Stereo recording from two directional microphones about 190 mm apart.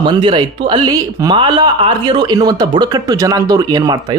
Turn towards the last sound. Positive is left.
turn(degrees=-20)  # may be behind; listen again after turning